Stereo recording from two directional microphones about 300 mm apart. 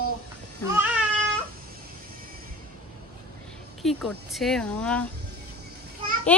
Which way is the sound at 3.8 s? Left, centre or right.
Centre.